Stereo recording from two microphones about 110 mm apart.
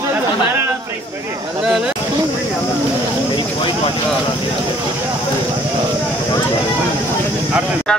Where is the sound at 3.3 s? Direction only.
50° left (ahead or behind).